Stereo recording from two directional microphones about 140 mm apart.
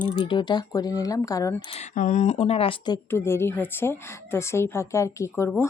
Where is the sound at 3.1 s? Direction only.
20° left (ahead or behind).